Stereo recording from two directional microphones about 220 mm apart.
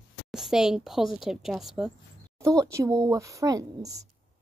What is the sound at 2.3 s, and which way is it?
A woman's voice, 15° right (ahead or behind).